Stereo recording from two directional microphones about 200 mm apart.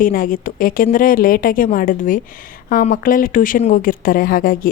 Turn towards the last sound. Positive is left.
turn(degrees=45)  # may be behind; listen again after turning